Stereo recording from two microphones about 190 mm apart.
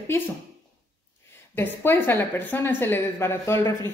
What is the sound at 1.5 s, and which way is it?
A woman's voice, 10° left (ahead or behind).